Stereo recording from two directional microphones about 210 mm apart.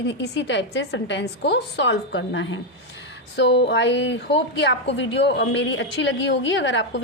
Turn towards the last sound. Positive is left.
turn(degrees=60)  # may be behind; listen again after turning